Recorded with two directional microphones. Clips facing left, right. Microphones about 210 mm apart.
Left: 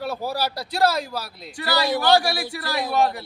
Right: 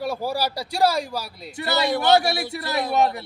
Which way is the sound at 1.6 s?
25° right (ahead or behind).